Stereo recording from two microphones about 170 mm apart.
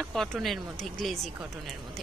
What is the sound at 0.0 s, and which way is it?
A woman's voice, centre (ahead or behind).